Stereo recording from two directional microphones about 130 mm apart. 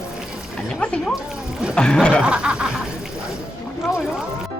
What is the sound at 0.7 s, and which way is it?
Speech, 5° left (ahead or behind).